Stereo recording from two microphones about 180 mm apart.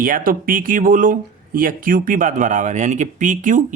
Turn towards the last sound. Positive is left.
turn(degrees=-45)  # may be behind; listen again after turning